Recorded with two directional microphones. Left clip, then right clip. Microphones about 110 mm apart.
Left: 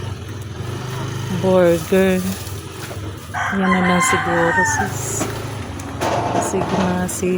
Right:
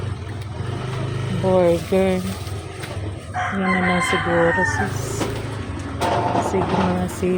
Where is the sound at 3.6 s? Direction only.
30° left (ahead or behind).